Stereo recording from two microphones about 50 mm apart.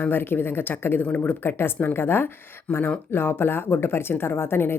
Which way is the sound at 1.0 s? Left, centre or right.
Left.